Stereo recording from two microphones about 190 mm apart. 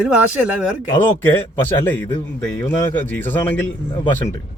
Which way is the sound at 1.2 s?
10° left (ahead or behind).